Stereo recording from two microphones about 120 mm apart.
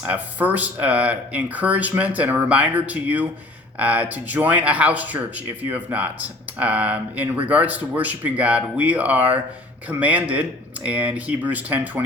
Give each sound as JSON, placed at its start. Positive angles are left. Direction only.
{"t": 0.0, "sound": "speech", "side_deg": -15}